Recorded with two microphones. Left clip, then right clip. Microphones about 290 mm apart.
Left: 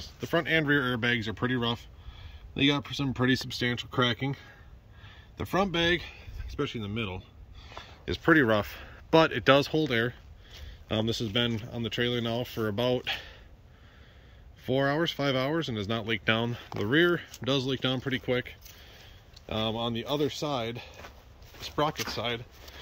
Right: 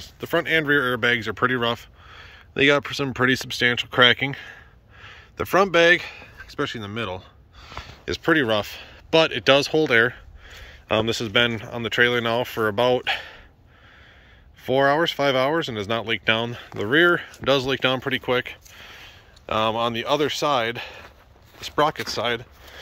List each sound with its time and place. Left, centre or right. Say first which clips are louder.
0.0 s speech: right 5 dB; centre
14.6 s speech: right 9 dB; centre
19.4 s speech: right 10 dB; right
20.2 s speech: right 9 dB; centre